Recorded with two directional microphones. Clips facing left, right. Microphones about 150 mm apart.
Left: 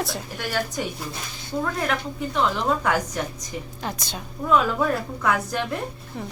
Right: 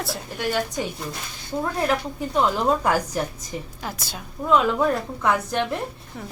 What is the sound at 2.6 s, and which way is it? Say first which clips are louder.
Speech: right 2 dB; 35° right (ahead or behind).